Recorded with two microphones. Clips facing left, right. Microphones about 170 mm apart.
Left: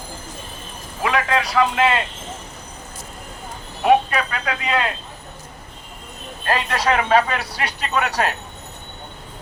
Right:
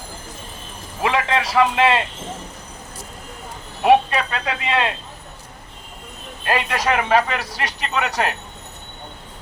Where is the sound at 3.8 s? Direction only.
25° right (ahead or behind).